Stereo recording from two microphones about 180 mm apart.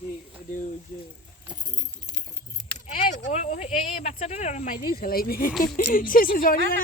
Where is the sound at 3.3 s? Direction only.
40° left (ahead or behind).